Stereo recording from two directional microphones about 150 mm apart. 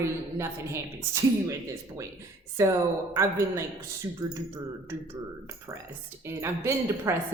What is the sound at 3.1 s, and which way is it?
A woman's voice, 20° right (ahead or behind).